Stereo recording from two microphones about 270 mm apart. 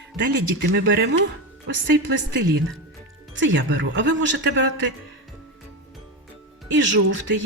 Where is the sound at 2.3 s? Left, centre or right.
Right.